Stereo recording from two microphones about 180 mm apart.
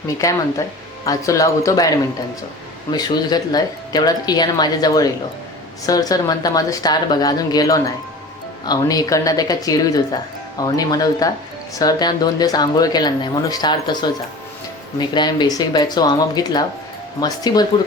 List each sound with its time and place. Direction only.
1.0 s speech: 20° left (ahead or behind)
2.9 s speech: 20° left (ahead or behind)